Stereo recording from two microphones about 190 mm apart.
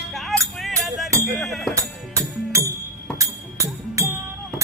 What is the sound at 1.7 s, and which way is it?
Music, 15° right (ahead or behind).